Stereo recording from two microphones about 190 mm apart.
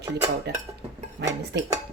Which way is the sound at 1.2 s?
60° right (ahead or behind).